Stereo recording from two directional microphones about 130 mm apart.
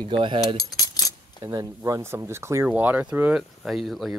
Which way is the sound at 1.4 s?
30° right (ahead or behind).